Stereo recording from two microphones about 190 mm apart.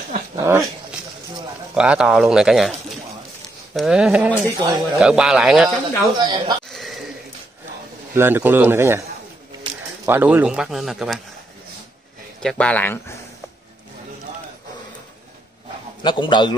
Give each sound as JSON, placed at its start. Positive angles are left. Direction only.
{"t": 0.4, "sound": "a man's voice", "side_deg": -15}
{"t": 1.8, "sound": "speech", "side_deg": -5}
{"t": 3.7, "sound": "speech", "side_deg": 0}
{"t": 4.5, "sound": "speech", "side_deg": -20}
{"t": 4.9, "sound": "speech", "side_deg": -5}
{"t": 6.1, "sound": "speech", "side_deg": -25}
{"t": 6.7, "sound": "a sound", "side_deg": 0}
{"t": 8.1, "sound": "a man's voice", "side_deg": -10}
{"t": 10.0, "sound": "speech", "side_deg": -10}
{"t": 12.4, "sound": "speech", "side_deg": 5}
{"t": 16.0, "sound": "a man's voice", "side_deg": 25}